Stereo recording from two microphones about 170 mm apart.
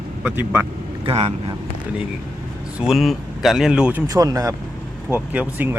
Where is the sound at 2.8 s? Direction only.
Centre (ahead or behind).